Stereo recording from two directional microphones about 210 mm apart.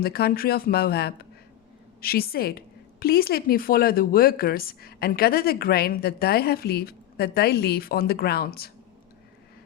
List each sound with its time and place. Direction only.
0.0 s a woman's voice: 45° left (ahead or behind)